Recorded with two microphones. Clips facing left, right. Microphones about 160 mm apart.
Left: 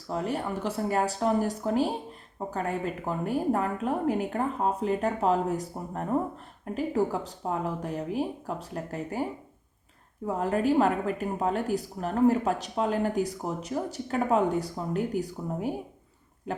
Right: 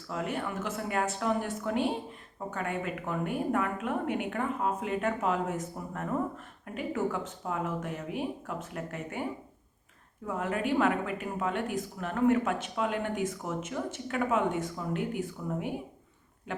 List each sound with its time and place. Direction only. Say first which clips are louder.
0.1 s a woman's voice: left 4 dB; 35° left (ahead or behind)
10.2 s a woman's voice: left 5 dB; 35° left (ahead or behind)
16.5 s a sound: left 4 dB; 40° left (ahead or behind)